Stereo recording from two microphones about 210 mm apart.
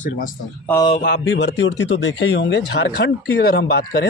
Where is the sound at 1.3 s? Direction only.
55° left (ahead or behind).